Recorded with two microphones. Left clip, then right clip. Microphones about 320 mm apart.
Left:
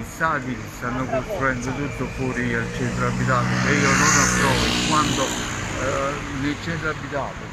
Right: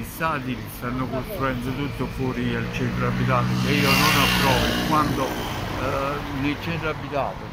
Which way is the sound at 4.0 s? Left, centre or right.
Right.